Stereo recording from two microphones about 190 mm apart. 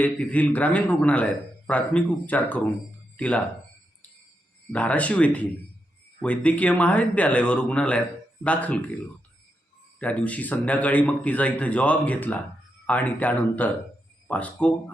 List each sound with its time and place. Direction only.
0.0 s speech: 10° left (ahead or behind)
4.7 s speech: 5° left (ahead or behind)
10.0 s speech: 5° left (ahead or behind)